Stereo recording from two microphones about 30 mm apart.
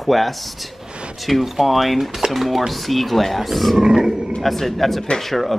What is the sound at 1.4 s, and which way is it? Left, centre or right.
Speech, centre.